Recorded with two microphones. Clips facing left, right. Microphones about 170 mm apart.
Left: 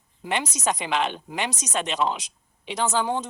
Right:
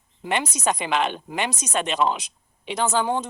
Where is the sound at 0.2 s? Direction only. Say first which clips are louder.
Right 2 dB; 55° right (ahead or behind).